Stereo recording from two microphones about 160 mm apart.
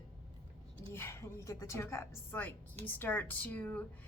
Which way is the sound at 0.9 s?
15° left (ahead or behind).